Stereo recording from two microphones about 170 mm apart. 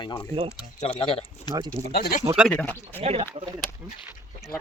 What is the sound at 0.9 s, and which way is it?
Speech, 30° left (ahead or behind).